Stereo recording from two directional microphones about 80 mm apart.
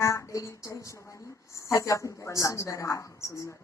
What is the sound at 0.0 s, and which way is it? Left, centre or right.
A woman's voice, left.